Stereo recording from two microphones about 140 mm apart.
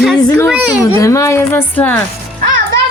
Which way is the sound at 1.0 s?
20° left (ahead or behind).